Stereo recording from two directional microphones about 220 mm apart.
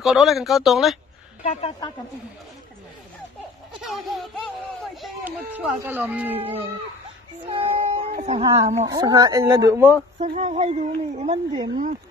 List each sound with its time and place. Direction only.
0.0 s speech: centre (ahead or behind)
1.4 s speech: 30° left (ahead or behind)
3.8 s speech: centre (ahead or behind)
7.4 s female singing: 25° right (ahead or behind)
8.2 s speech: 30° right (ahead or behind)
8.8 s speech: 15° right (ahead or behind)
10.1 s speech: 35° right (ahead or behind)